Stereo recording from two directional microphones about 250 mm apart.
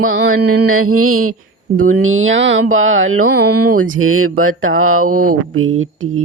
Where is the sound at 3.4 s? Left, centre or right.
Right.